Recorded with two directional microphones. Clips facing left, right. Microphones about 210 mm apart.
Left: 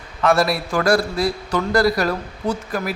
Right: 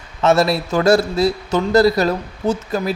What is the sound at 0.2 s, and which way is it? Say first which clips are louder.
A man's voice: right 3 dB; 25° right (ahead or behind).